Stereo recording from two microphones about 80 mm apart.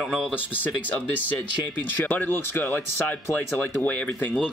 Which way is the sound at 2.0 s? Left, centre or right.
Left.